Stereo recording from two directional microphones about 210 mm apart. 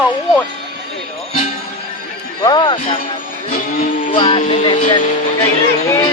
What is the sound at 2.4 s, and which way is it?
Speech, 20° left (ahead or behind).